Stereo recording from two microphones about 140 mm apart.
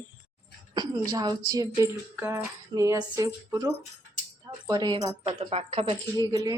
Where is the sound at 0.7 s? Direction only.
25° right (ahead or behind).